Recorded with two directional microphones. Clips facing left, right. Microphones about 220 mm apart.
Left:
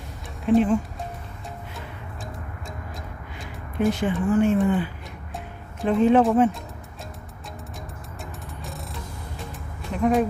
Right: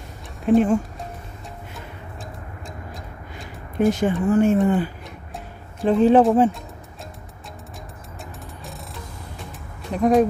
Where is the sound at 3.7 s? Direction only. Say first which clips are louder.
Right 3 dB; 45° right (ahead or behind).